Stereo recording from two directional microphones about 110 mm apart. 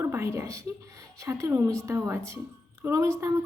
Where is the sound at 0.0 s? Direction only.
25° right (ahead or behind).